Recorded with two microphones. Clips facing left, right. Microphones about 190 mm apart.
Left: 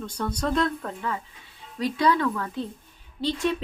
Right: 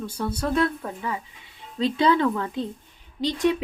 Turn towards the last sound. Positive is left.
turn(degrees=-15)  # may be behind; listen again after turning